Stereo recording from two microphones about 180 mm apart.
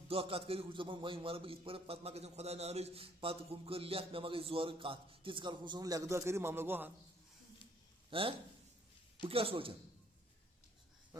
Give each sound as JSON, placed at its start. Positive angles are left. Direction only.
{"t": 0.1, "sound": "a man's voice", "side_deg": -30}
{"t": 8.1, "sound": "a man's voice", "side_deg": -30}